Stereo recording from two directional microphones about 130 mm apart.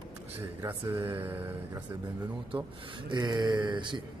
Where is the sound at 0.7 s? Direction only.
15° right (ahead or behind).